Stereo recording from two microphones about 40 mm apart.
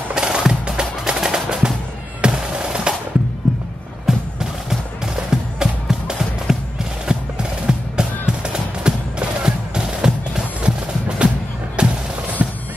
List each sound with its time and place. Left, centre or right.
0.1 s music: centre
4.0 s music: centre; by 11.9 s right
12.4 s fireworks: right